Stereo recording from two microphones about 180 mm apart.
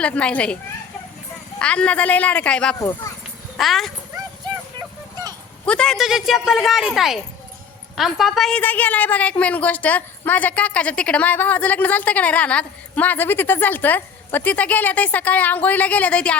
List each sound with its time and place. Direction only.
0.0 s a woman's voice: 5° left (ahead or behind)
2.7 s a woman's voice: 15° left (ahead or behind)
3.6 s speech: centre (ahead or behind)
5.6 s a woman's voice: 5° left (ahead or behind)